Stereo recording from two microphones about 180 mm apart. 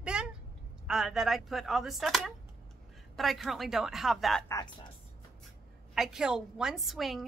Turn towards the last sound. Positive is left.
turn(degrees=0)  # may be behind; listen again after turning